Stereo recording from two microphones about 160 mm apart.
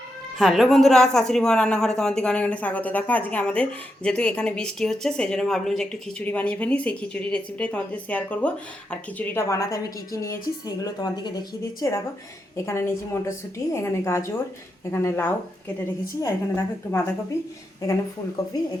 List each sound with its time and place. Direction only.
0.3 s a woman's voice: centre (ahead or behind); by 17.5 s 20° left (ahead or behind)